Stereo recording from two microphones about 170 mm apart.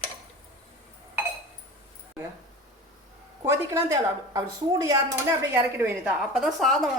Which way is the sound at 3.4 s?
15° right (ahead or behind).